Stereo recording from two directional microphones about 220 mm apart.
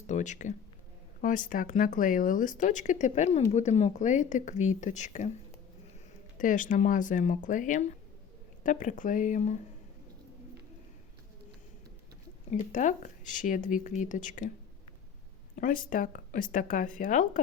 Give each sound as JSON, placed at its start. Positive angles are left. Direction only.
{"t": 0.1, "sound": "speech", "side_deg": 35}
{"t": 6.3, "sound": "speech", "side_deg": 35}
{"t": 12.5, "sound": "speech", "side_deg": 35}
{"t": 15.5, "sound": "speech", "side_deg": 35}